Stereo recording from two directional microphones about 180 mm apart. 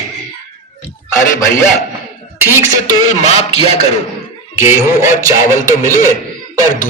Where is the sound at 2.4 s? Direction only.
15° right (ahead or behind).